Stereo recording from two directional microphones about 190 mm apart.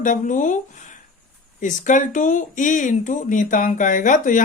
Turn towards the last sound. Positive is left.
turn(degrees=45)  # may be behind; listen again after turning